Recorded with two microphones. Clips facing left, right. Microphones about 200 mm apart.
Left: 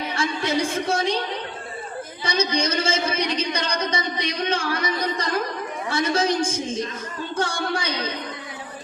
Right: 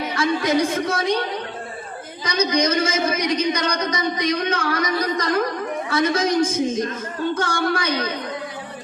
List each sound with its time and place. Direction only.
0.2 s a woman's voice: 30° left (ahead or behind)
2.2 s a man's voice: 30° left (ahead or behind)
5.9 s a man's voice: 30° left (ahead or behind)